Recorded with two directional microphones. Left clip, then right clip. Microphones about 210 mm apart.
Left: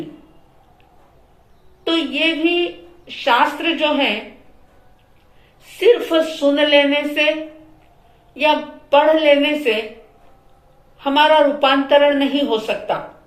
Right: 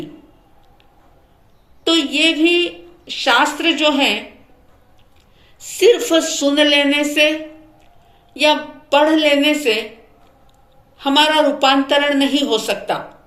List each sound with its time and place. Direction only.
1.8 s a woman's voice: 55° right (ahead or behind)
5.8 s a woman's voice: 55° right (ahead or behind)
10.9 s a woman's voice: 55° right (ahead or behind)